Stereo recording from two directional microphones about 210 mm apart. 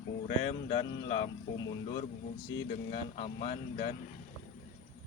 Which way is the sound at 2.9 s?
30° left (ahead or behind).